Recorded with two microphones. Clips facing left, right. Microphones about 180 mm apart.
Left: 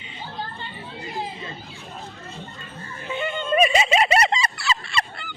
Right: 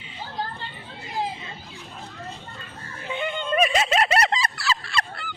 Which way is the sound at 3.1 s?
15° right (ahead or behind).